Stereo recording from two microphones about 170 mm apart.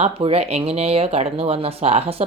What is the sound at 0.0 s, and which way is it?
Speech, 35° right (ahead or behind).